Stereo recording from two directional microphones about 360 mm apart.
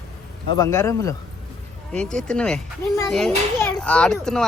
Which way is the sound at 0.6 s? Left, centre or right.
Centre.